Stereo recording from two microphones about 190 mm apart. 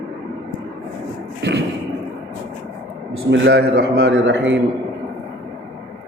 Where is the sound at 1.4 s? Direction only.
65° right (ahead or behind).